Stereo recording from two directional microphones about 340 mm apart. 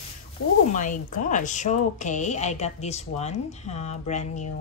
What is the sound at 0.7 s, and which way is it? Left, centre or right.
Speech, left.